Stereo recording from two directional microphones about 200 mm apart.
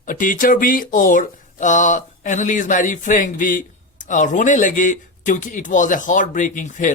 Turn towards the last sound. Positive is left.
turn(degrees=40)  # may be behind; listen again after turning